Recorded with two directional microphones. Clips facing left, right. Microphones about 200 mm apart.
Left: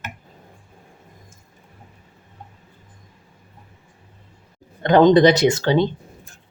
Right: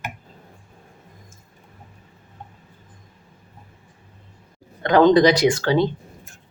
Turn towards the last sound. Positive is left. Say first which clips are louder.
# left 1 dB
turn(degrees=20)  # may be behind; listen again after turning